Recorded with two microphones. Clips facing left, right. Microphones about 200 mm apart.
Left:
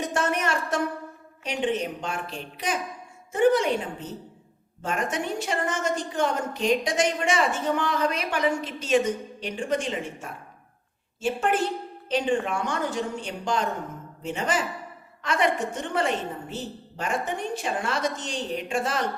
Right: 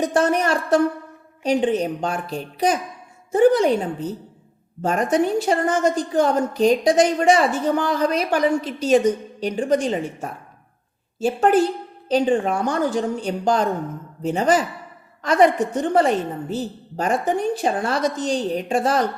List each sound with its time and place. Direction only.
0.0 s a woman's voice: 35° right (ahead or behind)